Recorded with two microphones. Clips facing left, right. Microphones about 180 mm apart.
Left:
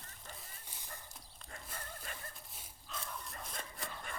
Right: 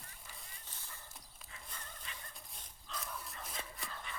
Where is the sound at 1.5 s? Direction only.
50° left (ahead or behind).